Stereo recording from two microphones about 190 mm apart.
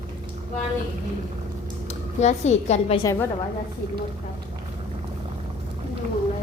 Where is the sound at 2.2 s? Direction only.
35° left (ahead or behind).